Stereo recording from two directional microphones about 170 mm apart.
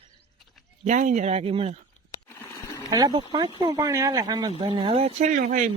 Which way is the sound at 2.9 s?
20° right (ahead or behind).